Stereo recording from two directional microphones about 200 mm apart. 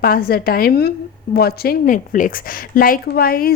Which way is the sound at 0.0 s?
45° left (ahead or behind).